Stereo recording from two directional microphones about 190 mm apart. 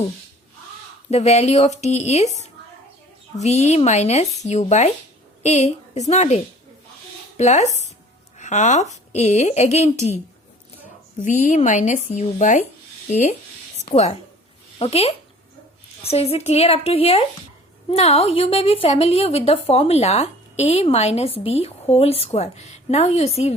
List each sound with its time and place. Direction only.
1.1 s a woman's voice: 35° left (ahead or behind)
11.2 s a woman's voice: 40° left (ahead or behind)
14.8 s a woman's voice: 30° left (ahead or behind)